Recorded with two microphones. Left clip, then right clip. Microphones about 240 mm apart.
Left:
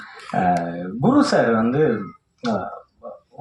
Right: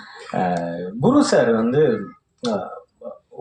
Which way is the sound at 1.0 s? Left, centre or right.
Right.